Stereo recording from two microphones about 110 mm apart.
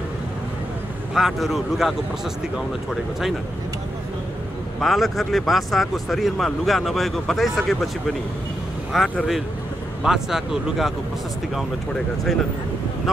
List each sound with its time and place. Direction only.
1.1 s speech: centre (ahead or behind)
4.7 s speech: centre (ahead or behind)
8.9 s speech: 5° right (ahead or behind)